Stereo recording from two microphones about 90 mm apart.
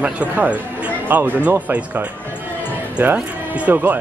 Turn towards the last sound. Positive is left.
turn(degrees=-20)  # may be behind; listen again after turning